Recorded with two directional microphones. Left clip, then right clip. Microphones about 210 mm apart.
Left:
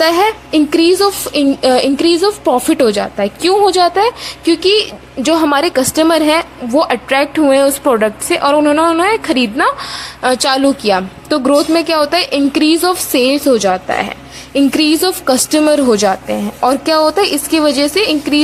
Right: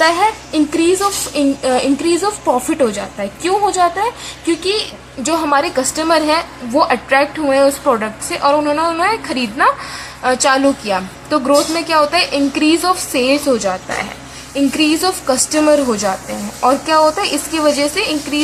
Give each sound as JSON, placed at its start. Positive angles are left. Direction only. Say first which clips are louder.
{"t": 0.0, "sound": "speech", "louder": "left 2 dB", "side_deg": 40}
{"t": 5.2, "sound": "speech", "louder": "left 3 dB", "side_deg": 35}